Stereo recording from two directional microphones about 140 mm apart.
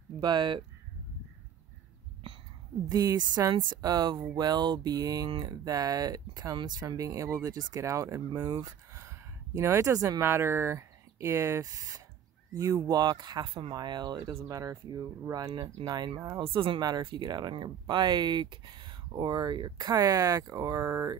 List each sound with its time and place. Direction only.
0.2 s speech: 30° right (ahead or behind)
2.9 s speech: 25° right (ahead or behind)